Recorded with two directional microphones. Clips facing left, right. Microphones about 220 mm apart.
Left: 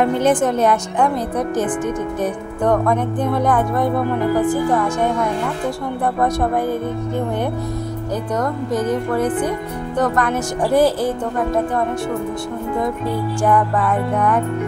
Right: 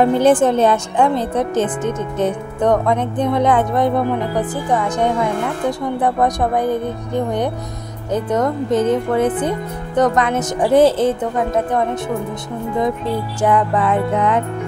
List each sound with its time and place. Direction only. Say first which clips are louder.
0.0 s speech: right 3 dB; 30° right (ahead or behind)
13.4 s speech: right 2 dB; 20° right (ahead or behind)